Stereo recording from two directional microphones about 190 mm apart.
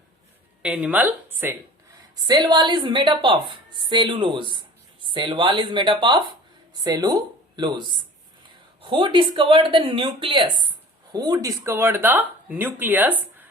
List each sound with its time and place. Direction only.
0.6 s speech: 5° right (ahead or behind)
2.2 s a woman's voice: 20° right (ahead or behind)